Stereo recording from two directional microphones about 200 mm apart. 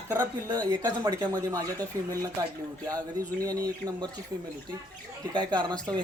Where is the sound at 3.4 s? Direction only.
15° right (ahead or behind).